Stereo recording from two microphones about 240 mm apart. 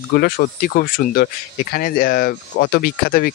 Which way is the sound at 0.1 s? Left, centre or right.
Left.